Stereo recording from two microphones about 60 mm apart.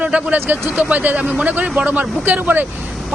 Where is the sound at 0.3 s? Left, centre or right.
Right.